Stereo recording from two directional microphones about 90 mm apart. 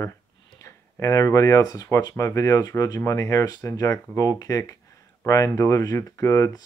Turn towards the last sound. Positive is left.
turn(degrees=35)  # may be behind; listen again after turning